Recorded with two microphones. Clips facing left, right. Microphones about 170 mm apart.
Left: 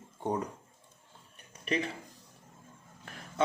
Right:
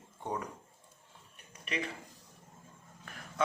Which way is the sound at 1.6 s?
35° left (ahead or behind).